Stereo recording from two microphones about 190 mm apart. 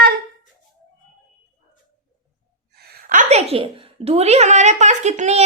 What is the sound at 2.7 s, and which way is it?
A woman's voice, 55° right (ahead or behind).